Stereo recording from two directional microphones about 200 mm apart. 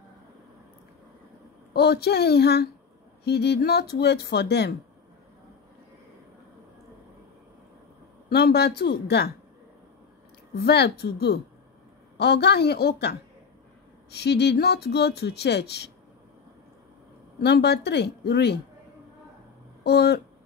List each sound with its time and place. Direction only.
1.7 s speech: 55° left (ahead or behind)
8.3 s speech: 55° left (ahead or behind)
10.5 s speech: 55° left (ahead or behind)
17.4 s speech: 55° left (ahead or behind)
19.8 s speech: 55° left (ahead or behind)